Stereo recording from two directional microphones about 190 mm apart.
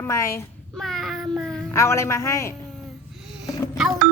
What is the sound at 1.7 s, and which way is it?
Speech, 15° left (ahead or behind).